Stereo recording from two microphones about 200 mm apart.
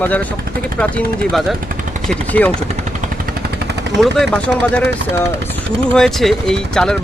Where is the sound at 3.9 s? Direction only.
Centre (ahead or behind).